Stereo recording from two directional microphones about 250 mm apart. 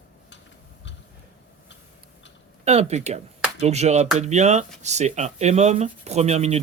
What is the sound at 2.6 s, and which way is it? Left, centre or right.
Speech, right.